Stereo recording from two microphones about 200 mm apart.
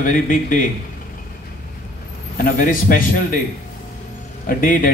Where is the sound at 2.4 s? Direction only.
40° left (ahead or behind).